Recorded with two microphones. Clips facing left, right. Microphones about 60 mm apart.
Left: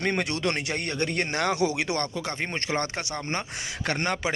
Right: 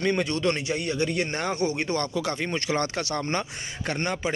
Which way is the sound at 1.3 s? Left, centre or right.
Left.